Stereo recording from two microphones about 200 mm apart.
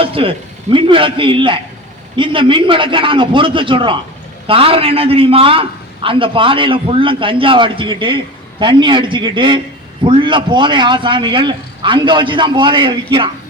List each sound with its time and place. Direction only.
0.0 s a man's voice: 25° right (ahead or behind)